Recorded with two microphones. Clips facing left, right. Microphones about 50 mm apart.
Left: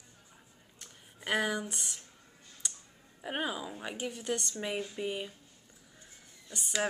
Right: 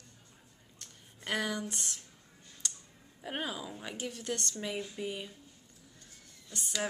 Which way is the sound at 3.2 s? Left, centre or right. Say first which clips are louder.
Left 3 dB; centre.